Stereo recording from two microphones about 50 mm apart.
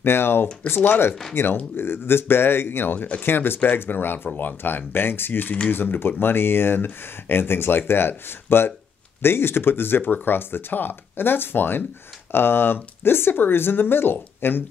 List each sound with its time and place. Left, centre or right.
0.0 s speech: left